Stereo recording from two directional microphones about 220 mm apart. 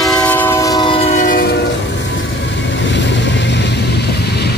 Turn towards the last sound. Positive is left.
turn(degrees=50)  # may be behind; listen again after turning